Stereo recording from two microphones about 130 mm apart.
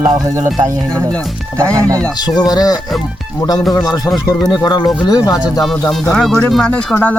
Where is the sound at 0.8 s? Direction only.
10° left (ahead or behind).